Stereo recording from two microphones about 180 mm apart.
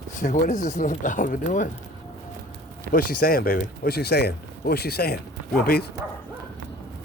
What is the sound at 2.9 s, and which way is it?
Speech, 55° left (ahead or behind).